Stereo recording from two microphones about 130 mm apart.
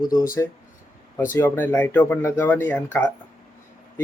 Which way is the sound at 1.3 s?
20° left (ahead or behind).